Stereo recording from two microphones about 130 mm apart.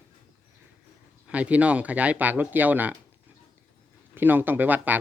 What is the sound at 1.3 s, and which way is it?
Speech, 10° right (ahead or behind).